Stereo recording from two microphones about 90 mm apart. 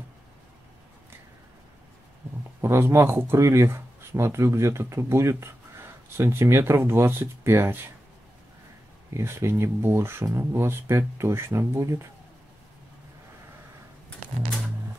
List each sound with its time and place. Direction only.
2.6 s speech: 30° right (ahead or behind)
9.1 s speech: 30° right (ahead or behind)